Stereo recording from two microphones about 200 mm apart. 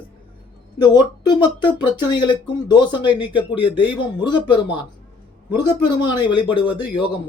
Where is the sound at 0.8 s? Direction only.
20° left (ahead or behind).